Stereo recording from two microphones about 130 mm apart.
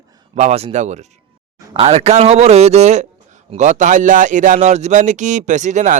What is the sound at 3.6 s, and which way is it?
Speech, 75° right (ahead or behind).